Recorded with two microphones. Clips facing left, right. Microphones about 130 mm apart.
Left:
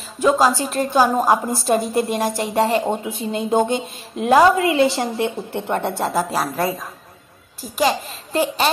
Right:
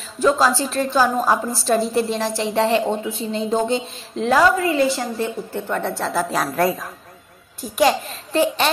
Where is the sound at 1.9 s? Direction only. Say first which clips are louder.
Left 1 dB; 50° left (ahead or behind).